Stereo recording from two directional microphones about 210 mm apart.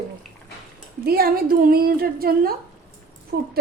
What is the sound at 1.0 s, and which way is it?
A woman's voice, 45° right (ahead or behind).